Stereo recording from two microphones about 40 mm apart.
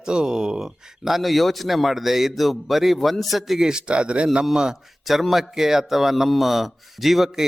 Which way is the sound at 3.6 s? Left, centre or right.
Centre.